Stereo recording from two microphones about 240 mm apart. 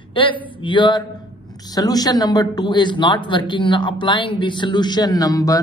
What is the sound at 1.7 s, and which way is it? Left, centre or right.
A man's voice, centre.